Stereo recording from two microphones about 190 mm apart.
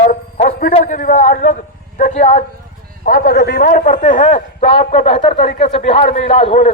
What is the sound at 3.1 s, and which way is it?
Speech, 45° left (ahead or behind).